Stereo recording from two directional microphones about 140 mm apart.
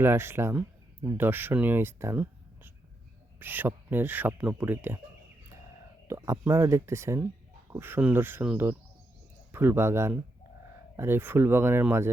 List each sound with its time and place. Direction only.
0.0 s speech: 15° right (ahead or behind)
3.4 s speech: 15° right (ahead or behind)
6.1 s speech: 20° right (ahead or behind)